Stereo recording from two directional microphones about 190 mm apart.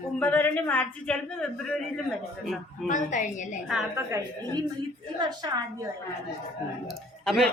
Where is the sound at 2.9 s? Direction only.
40° left (ahead or behind).